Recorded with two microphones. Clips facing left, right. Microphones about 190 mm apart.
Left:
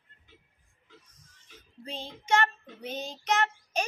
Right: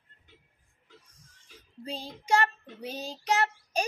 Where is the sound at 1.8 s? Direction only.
35° right (ahead or behind).